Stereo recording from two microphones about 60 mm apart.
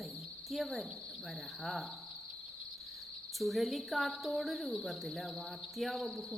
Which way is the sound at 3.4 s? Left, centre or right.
Centre.